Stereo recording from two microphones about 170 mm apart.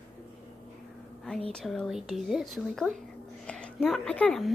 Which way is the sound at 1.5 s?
5° left (ahead or behind).